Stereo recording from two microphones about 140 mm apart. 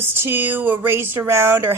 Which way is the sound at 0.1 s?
15° right (ahead or behind).